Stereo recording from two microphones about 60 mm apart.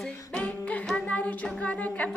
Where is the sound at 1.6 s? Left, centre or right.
Left.